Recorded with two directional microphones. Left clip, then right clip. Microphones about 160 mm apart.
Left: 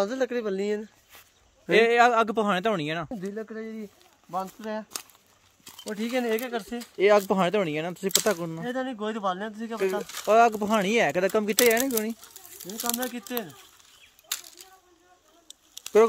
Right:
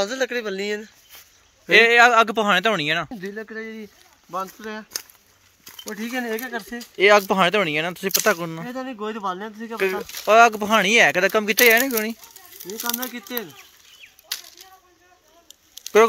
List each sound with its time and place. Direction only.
0.0 s speech: 50° left (ahead or behind)
1.7 s a man's voice: 10° left (ahead or behind)
3.1 s speech: 90° left
4.3 s speech: 60° left (ahead or behind)
6.1 s speech: 45° left (ahead or behind)
7.0 s a man's voice: centre (ahead or behind)
8.9 s speech: 35° left (ahead or behind)
9.8 s speech: centre (ahead or behind)
12.4 s speech: 40° left (ahead or behind)